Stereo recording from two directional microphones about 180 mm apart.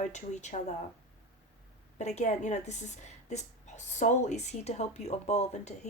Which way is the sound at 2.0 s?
40° left (ahead or behind).